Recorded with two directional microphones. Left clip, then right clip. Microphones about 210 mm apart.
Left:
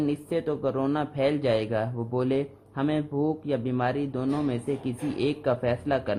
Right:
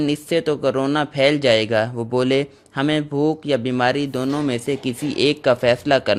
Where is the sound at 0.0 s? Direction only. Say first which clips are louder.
Right 8 dB; 35° right (ahead or behind).